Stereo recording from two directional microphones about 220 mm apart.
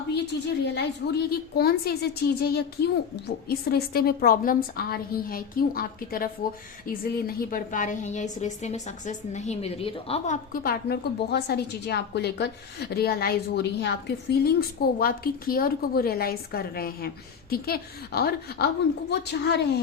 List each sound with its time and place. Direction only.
0.1 s a woman's voice: 50° left (ahead or behind)